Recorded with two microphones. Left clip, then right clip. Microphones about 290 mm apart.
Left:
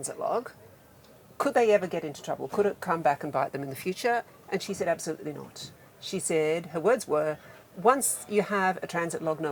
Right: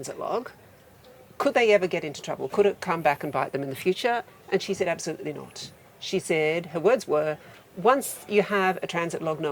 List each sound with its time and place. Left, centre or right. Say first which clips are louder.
0.0 s a woman's voice: even; right
1.8 s speech: right 4 dB; right